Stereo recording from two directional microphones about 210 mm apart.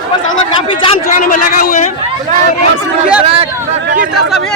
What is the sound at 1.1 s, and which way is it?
Speech, 40° left (ahead or behind).